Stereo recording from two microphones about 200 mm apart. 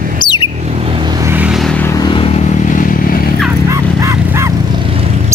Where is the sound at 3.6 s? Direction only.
15° right (ahead or behind).